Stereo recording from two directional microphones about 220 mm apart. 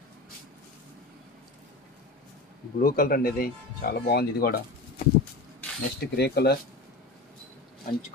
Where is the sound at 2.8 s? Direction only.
40° left (ahead or behind).